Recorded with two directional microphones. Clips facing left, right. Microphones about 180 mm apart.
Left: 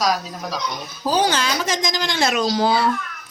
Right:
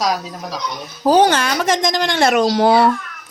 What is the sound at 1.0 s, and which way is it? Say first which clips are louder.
A woman's voice: right 7 dB; 60° right (ahead or behind).